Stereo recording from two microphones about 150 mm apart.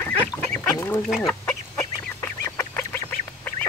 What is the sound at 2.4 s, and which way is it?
Goose, 15° left (ahead or behind).